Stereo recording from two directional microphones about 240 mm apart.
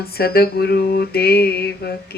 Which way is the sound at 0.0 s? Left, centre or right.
Left.